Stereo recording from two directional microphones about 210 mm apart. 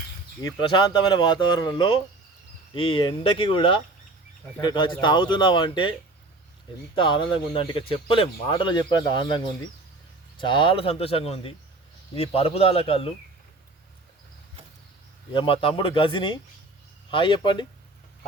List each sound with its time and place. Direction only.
0.4 s speech: 20° left (ahead or behind)
6.9 s speech: 25° left (ahead or behind)
15.3 s speech: 25° left (ahead or behind)